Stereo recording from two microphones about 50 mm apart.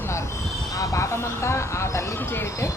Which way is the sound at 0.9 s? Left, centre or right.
Left.